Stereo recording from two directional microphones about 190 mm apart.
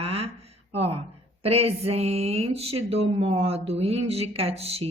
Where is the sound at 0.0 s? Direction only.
30° right (ahead or behind).